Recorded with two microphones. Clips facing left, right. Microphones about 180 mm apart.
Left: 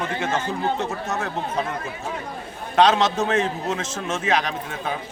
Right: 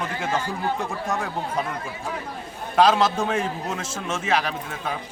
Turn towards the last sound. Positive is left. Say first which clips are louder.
# left 1 dB
turn(degrees=-5)  # may be behind; listen again after turning